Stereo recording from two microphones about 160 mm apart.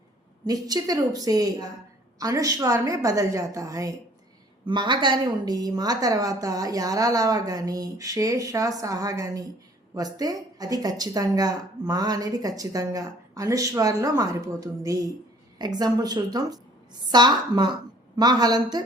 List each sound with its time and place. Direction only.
0.4 s speech: 25° right (ahead or behind)